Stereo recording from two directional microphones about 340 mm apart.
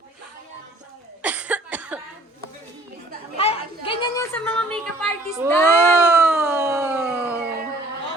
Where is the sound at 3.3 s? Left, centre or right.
Centre.